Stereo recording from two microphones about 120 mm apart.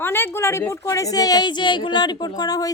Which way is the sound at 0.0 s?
20° left (ahead or behind).